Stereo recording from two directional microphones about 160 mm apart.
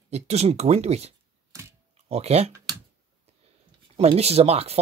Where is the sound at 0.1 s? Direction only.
40° right (ahead or behind).